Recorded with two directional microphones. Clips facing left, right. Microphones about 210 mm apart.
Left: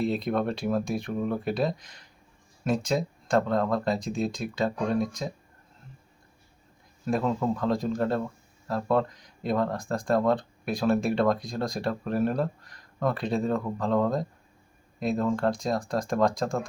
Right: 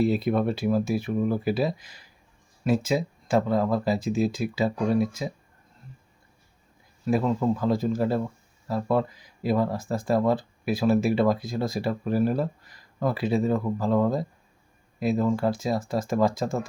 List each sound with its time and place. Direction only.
0.0 s speech: 5° right (ahead or behind)
7.0 s speech: centre (ahead or behind)